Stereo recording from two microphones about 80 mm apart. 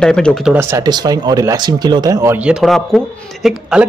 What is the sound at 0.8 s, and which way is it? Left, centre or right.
Speech, right.